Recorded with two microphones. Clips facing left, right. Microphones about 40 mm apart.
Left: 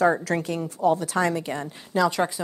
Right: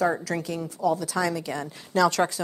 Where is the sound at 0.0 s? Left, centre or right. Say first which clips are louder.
Left 4 dB; left.